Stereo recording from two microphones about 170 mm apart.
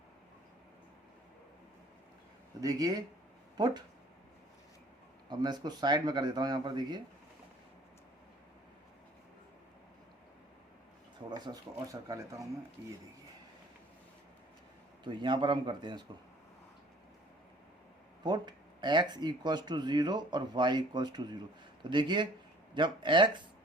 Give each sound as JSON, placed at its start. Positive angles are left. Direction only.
{"t": 2.6, "sound": "speech", "side_deg": -20}
{"t": 5.3, "sound": "speech", "side_deg": -25}
{"t": 11.3, "sound": "speech", "side_deg": -25}
{"t": 15.0, "sound": "speech", "side_deg": -25}
{"t": 18.2, "sound": "speech", "side_deg": -25}